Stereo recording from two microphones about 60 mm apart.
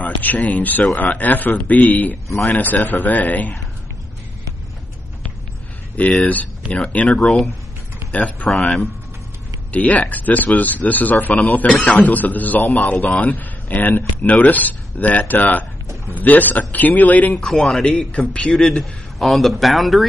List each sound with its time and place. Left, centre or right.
0.0 s speech: left
6.0 s speech: left
7.2 s a man's voice: centre
8.1 s speech: left
8.5 s a man's voice: centre
9.7 s speech: left
17.4 s a man's voice: centre
17.8 s a man's voice: centre
18.5 s a man's voice: centre